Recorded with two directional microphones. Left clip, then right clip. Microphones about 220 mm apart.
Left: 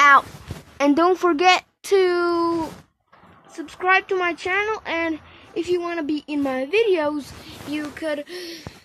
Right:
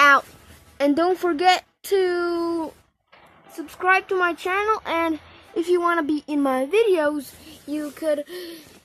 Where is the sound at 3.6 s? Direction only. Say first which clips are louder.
Left 1 dB; 15° right (ahead or behind).